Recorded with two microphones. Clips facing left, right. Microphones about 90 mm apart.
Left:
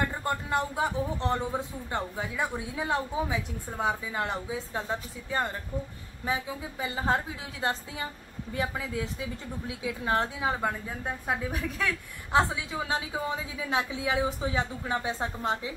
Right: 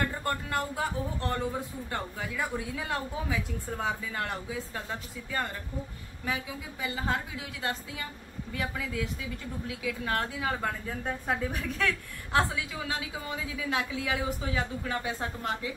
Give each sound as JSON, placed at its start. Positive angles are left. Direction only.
{"t": 0.2, "sound": "a man's voice", "side_deg": 20}
{"t": 12.3, "sound": "a man's voice", "side_deg": 20}